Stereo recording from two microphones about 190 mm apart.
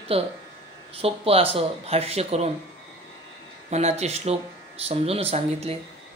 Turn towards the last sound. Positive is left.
turn(degrees=-30)  # may be behind; listen again after turning